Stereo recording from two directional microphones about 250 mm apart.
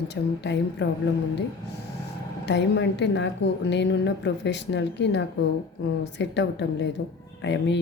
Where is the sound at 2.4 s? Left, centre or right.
Left.